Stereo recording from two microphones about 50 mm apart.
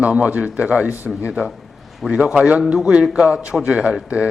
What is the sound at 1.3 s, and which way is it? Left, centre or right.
A man's voice, centre.